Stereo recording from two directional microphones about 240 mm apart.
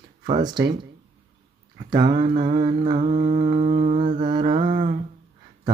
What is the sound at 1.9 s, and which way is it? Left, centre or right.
Mantra, centre.